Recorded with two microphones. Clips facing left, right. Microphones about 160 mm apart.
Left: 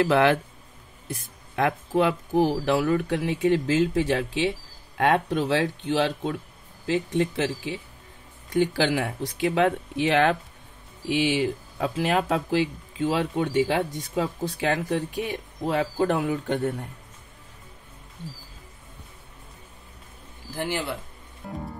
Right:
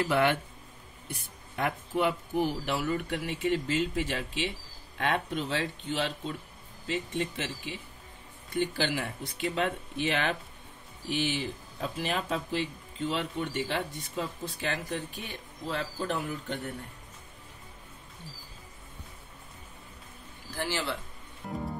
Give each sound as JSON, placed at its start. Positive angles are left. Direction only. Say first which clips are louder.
{"t": 0.0, "sound": "speech", "louder": "left 6 dB", "side_deg": 90}
{"t": 8.5, "sound": "speech", "louder": "left 7 dB", "side_deg": 90}
{"t": 20.5, "sound": "speech", "louder": "left 4 dB", "side_deg": 15}